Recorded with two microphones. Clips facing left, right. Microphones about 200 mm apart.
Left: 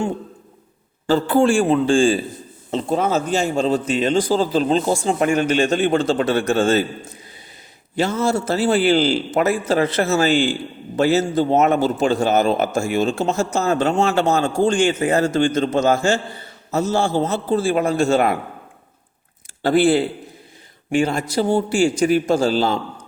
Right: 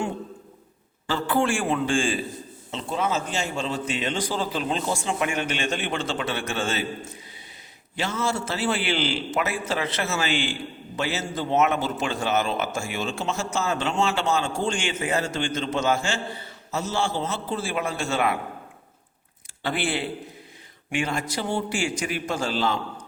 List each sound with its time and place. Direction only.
1.0 s a man's voice: 40° left (ahead or behind)
7.9 s a man's voice: 40° left (ahead or behind)
19.6 s a man's voice: 40° left (ahead or behind)